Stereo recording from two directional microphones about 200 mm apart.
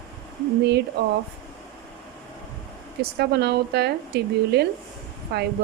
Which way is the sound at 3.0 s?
55° right (ahead or behind).